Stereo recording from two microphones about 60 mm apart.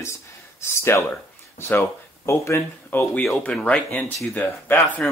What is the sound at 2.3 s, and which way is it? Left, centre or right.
Speech, left.